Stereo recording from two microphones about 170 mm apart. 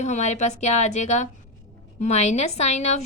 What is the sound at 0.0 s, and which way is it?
A woman's voice, 40° left (ahead or behind).